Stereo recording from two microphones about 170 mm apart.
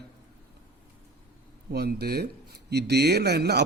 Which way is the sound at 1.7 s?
70° right (ahead or behind).